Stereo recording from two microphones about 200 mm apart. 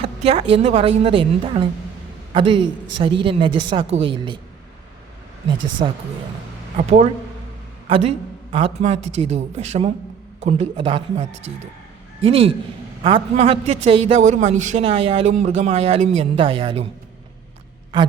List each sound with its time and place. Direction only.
0.0 s a woman's voice: 30° right (ahead or behind)
5.8 s a woman's voice: 25° right (ahead or behind)